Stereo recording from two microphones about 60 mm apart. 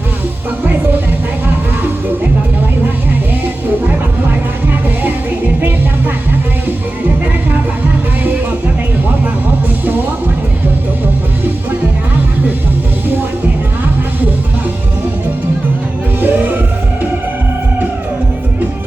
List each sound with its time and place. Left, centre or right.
16.2 s music: right